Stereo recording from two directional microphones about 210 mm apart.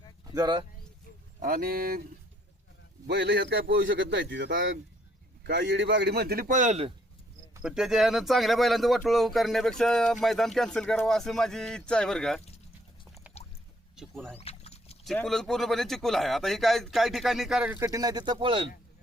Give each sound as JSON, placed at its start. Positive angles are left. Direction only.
{"t": 0.3, "sound": "speech", "side_deg": -20}
{"t": 1.4, "sound": "a man's voice", "side_deg": -45}
{"t": 3.1, "sound": "a man's voice", "side_deg": -55}
{"t": 7.6, "sound": "speech", "side_deg": -5}
{"t": 13.2, "sound": "a sound", "side_deg": -5}
{"t": 13.9, "sound": "speech", "side_deg": -5}
{"t": 14.3, "sound": "rowboat", "side_deg": 30}
{"t": 15.0, "sound": "speech", "side_deg": 0}